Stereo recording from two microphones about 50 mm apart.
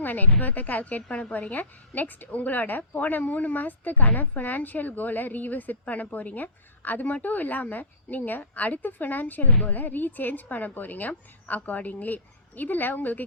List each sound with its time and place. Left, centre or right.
0.0 s a woman's voice: left